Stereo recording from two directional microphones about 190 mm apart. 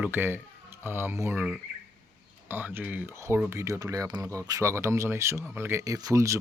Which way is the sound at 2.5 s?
10° right (ahead or behind).